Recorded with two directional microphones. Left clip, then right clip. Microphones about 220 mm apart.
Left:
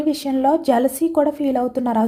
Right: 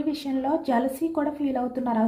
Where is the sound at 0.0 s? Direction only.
55° left (ahead or behind).